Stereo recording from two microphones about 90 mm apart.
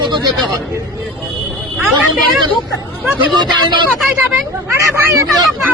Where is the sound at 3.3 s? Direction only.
55° right (ahead or behind).